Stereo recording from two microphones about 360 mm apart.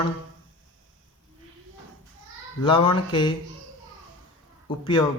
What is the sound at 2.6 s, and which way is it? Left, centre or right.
Speech, centre.